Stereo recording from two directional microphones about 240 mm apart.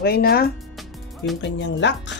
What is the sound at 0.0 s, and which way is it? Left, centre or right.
Speech, left.